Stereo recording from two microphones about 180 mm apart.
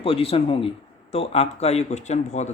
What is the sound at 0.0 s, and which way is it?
Speech, 30° left (ahead or behind).